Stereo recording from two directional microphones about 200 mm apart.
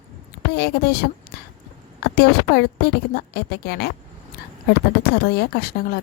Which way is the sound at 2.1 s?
50° left (ahead or behind).